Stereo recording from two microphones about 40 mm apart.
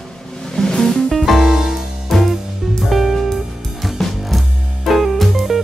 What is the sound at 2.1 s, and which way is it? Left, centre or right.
Music, centre.